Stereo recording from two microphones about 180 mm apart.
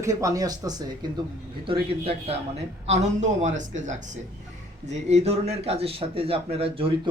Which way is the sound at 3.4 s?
45° right (ahead or behind).